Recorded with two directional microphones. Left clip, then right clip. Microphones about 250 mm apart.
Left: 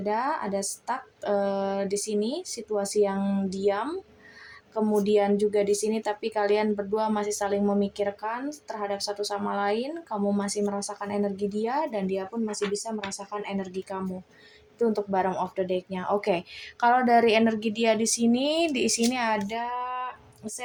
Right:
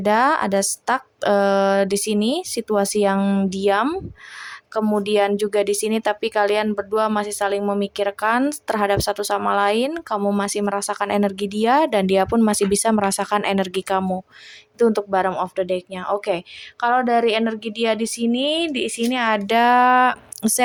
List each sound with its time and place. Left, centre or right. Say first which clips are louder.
0.0 s a woman's voice: right 10 dB; right